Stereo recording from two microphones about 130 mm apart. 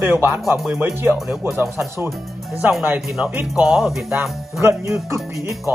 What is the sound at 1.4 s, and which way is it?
Music, 20° right (ahead or behind).